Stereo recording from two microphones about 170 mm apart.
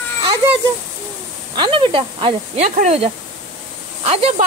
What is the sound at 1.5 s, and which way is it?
Speech, 30° right (ahead or behind).